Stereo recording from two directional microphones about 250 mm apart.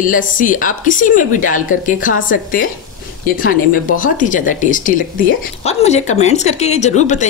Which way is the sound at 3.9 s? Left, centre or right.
Left.